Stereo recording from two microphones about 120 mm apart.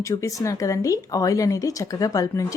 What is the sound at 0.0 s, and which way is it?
Speech, 25° left (ahead or behind).